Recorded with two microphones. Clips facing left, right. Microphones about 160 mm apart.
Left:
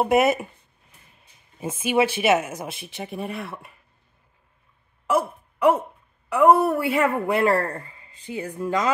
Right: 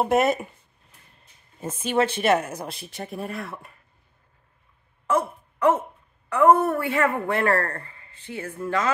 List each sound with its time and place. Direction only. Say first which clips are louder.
0.0 s speech: left 2 dB; 5° left (ahead or behind)
5.0 s a sound: left 1 dB; 10° left (ahead or behind)
6.2 s a woman's voice: left 1 dB; 10° left (ahead or behind)